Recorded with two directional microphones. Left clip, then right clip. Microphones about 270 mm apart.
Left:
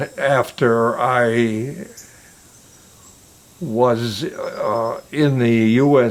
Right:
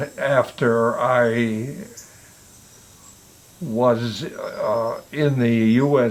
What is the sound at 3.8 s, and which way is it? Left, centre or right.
Speech, left.